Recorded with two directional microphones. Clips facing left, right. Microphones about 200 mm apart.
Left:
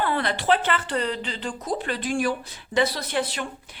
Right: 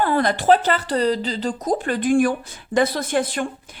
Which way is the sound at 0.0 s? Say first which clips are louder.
Right 6 dB; 45° right (ahead or behind).